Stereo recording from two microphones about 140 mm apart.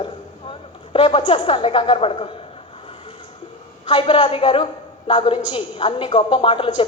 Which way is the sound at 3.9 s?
40° left (ahead or behind).